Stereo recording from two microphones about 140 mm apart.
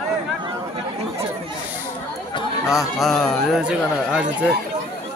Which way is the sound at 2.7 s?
5° right (ahead or behind).